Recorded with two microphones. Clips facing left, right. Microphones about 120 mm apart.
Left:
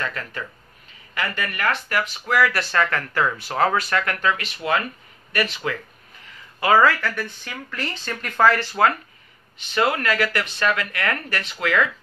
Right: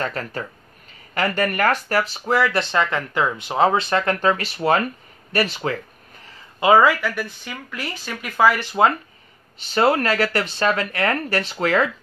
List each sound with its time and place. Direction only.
0.0 s speech: 35° right (ahead or behind)
6.6 s speech: 15° right (ahead or behind)
9.6 s speech: 35° right (ahead or behind)